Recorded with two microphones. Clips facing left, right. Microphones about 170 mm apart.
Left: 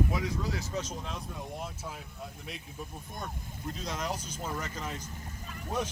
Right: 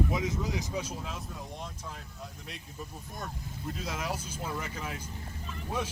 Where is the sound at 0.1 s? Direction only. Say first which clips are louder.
Right 1 dB; 20° right (ahead or behind); by 1.6 s 5° right (ahead or behind).